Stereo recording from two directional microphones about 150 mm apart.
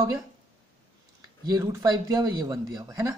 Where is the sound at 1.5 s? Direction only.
20° right (ahead or behind).